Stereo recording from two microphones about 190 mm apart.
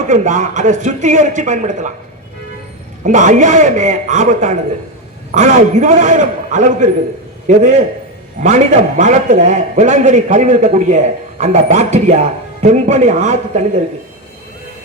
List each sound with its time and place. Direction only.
0.1 s a man's voice: 40° right (ahead or behind)
3.0 s a man's voice: 40° right (ahead or behind)